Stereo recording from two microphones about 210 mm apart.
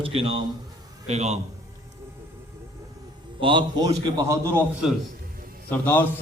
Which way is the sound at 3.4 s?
20° right (ahead or behind).